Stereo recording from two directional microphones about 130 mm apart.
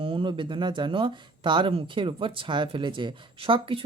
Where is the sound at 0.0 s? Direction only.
40° right (ahead or behind).